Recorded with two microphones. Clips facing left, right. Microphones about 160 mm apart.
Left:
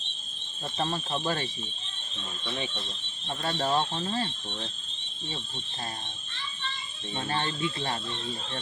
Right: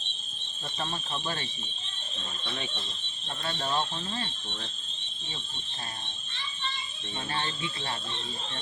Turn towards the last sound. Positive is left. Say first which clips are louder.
# left 3 dB
turn(degrees=30)  # may be behind; listen again after turning